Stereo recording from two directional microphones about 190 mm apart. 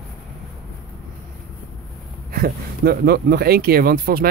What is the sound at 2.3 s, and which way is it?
Speech, 50° right (ahead or behind).